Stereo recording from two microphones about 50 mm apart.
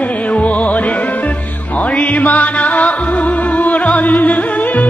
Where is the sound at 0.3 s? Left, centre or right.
Left.